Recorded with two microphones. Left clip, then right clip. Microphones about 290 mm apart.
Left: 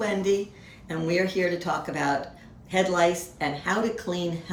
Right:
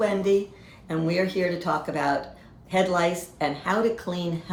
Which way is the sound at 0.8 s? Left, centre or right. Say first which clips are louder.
Even; centre.